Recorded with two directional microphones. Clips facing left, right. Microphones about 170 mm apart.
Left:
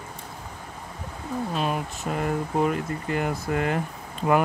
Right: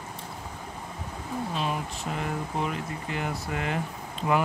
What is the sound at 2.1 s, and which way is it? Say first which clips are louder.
Speech: left 6 dB; 45° left (ahead or behind).